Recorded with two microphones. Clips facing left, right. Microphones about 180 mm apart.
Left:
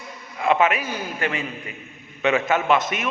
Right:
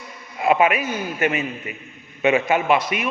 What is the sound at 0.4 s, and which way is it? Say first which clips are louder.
A man's voice: right 2 dB; 15° right (ahead or behind).